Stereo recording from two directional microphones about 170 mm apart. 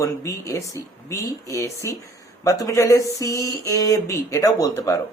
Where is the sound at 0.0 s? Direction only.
20° left (ahead or behind).